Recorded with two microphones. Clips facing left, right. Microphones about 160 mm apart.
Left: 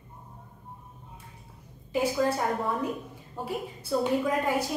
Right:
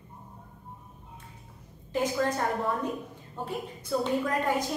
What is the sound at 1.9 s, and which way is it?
A woman's voice, 10° left (ahead or behind).